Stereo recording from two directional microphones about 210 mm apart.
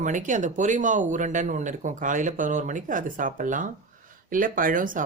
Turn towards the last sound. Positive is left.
turn(degrees=-40)  # may be behind; listen again after turning